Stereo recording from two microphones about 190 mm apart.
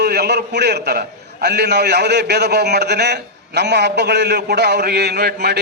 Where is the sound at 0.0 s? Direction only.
60° right (ahead or behind).